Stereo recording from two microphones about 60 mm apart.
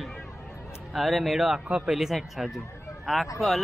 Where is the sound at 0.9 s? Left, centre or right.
Centre.